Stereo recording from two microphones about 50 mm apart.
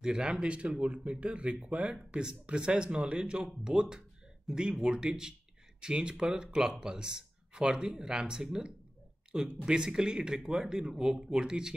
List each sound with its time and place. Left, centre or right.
0.0 s speech: centre